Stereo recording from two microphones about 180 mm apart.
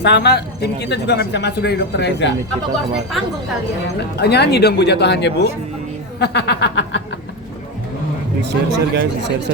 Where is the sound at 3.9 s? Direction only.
65° left (ahead or behind).